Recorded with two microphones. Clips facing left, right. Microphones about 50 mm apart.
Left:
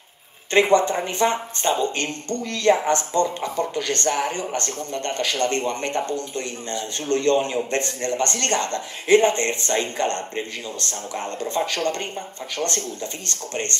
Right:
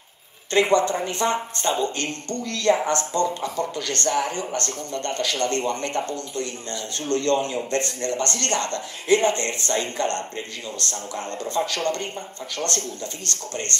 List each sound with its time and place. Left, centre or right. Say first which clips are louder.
0.5 s speech: left 2 dB; left